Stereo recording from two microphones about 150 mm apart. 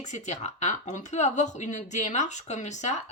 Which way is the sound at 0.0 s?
50° left (ahead or behind).